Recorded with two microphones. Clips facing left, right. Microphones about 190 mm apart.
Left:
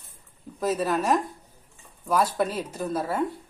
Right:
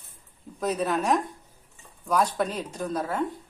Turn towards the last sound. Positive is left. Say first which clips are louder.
# left 1 dB
turn(degrees=10)  # may be behind; listen again after turning